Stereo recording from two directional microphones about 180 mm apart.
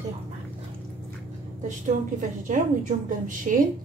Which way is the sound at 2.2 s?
45° right (ahead or behind).